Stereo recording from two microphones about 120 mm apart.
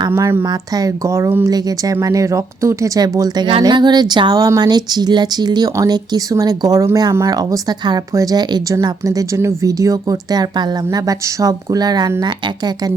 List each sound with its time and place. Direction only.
0.1 s a woman's voice: 20° right (ahead or behind)
0.4 s a woman's voice: 30° right (ahead or behind)
1.5 s speech: 30° right (ahead or behind)